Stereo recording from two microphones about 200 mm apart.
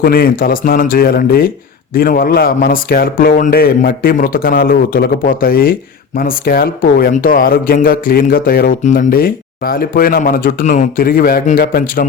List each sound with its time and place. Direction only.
0.0 s speech: 50° left (ahead or behind)